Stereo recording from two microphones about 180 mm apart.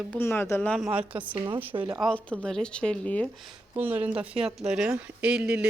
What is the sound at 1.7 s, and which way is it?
Speech, 30° right (ahead or behind).